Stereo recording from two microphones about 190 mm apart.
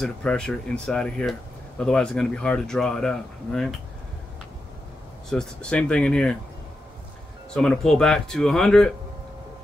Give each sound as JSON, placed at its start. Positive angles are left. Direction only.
{"t": 0.0, "sound": "speech", "side_deg": 5}
{"t": 5.3, "sound": "speech", "side_deg": 5}
{"t": 7.5, "sound": "speech", "side_deg": 5}